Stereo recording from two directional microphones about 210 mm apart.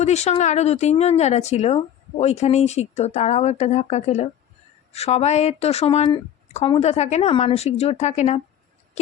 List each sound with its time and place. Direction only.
0.0 s speech: 30° left (ahead or behind)